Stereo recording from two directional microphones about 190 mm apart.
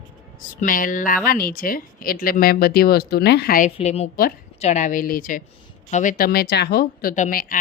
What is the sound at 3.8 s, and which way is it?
A woman's voice, 35° left (ahead or behind).